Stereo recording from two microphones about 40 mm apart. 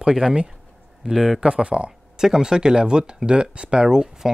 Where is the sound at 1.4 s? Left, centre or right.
Right.